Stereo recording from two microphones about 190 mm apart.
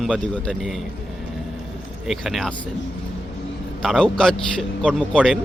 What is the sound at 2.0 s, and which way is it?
Speech, centre (ahead or behind).